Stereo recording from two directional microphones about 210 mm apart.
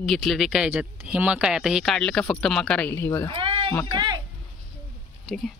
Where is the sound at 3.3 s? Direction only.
25° right (ahead or behind).